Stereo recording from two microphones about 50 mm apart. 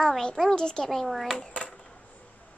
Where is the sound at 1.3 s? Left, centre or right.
Left.